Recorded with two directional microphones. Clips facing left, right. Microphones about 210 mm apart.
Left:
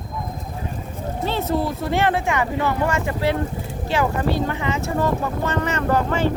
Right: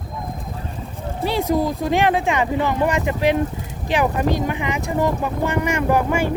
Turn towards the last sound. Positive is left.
turn(degrees=-10)  # may be behind; listen again after turning